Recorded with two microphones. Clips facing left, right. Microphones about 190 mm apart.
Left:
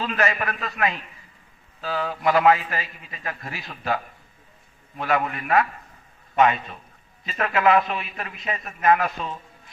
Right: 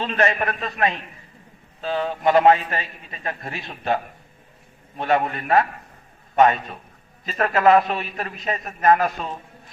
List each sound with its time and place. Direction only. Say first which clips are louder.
0.0 s a man's voice: right 3 dB; 30° right (ahead or behind)